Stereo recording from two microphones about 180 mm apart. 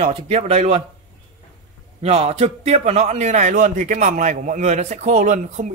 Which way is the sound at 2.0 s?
35° right (ahead or behind).